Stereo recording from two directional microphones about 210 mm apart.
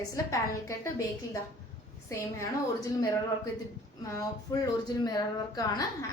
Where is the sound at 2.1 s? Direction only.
15° left (ahead or behind).